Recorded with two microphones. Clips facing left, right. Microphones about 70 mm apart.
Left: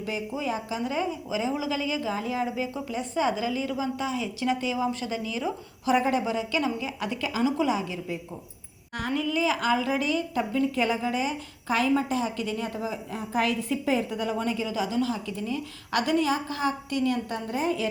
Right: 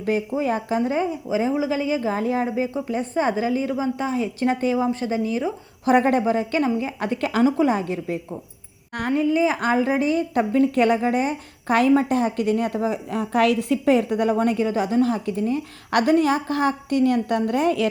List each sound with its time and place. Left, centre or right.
0.3 s a woman's voice: right
5.9 s a woman's voice: right
7.5 s a woman's voice: right
9.0 s a woman's voice: right
10.3 s a woman's voice: right